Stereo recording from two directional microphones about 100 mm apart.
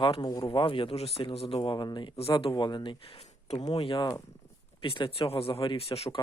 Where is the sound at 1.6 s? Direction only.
50° left (ahead or behind).